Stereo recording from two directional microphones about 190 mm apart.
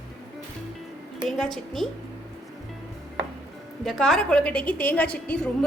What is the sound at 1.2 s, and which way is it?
Speech, centre (ahead or behind).